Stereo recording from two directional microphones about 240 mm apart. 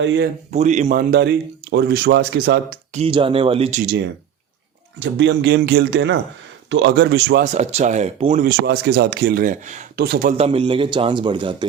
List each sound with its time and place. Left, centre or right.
0.0 s speech: right
0.5 s a man's voice: right
1.1 s speech: right
3.0 s a man's voice: right
4.9 s speech: right
7.4 s a man's voice: right
8.4 s speech: right
10.3 s a man's voice: right